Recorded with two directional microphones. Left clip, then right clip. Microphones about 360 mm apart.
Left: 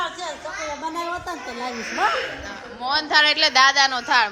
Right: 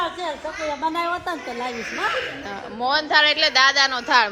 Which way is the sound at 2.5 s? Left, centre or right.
Centre.